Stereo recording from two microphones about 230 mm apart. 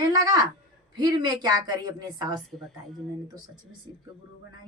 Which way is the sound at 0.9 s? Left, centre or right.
Centre.